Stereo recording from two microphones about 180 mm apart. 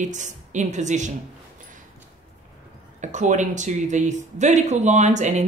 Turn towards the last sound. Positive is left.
turn(degrees=-40)  # may be behind; listen again after turning